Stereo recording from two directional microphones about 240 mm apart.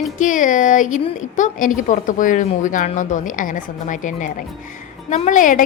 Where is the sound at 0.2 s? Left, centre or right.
Left.